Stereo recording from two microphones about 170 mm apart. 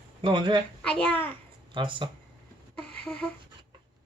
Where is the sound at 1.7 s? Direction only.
30° right (ahead or behind).